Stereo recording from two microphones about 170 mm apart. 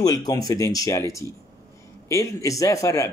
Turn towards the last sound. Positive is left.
turn(degrees=20)  # may be behind; listen again after turning